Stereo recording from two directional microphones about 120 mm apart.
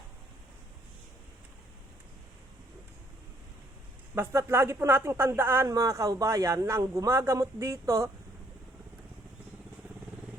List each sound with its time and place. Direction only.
4.1 s speech: 20° right (ahead or behind)